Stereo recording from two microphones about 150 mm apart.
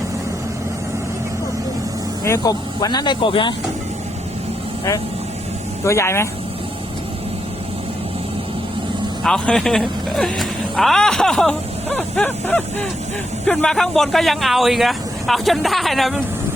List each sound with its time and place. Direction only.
2.2 s speech: 20° left (ahead or behind)
5.8 s speech: 20° left (ahead or behind)
9.2 s speech: 5° left (ahead or behind)